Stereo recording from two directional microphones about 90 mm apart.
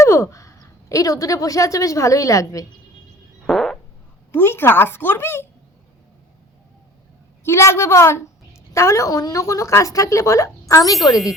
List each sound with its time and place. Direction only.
0.0 s a woman's voice: 35° left (ahead or behind)
3.4 s fart: centre (ahead or behind)
4.3 s a woman's voice: 25° left (ahead or behind)
7.4 s a woman's voice: 30° left (ahead or behind)